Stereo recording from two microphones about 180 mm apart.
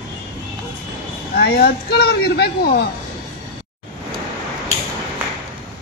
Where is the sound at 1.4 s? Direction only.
60° left (ahead or behind).